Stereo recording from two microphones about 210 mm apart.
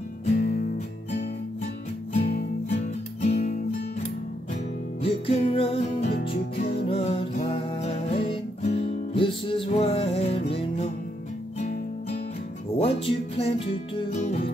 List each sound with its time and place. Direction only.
2.2 s music: 40° left (ahead or behind)
5.0 s music: 30° left (ahead or behind)
6.1 s music: 50° left (ahead or behind)
6.7 s music: 25° left (ahead or behind)
12.7 s music: 25° left (ahead or behind)